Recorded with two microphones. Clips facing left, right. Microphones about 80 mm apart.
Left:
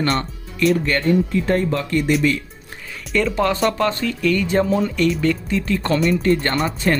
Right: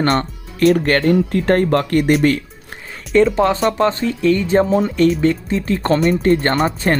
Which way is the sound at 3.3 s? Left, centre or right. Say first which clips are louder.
Right 3 dB; right.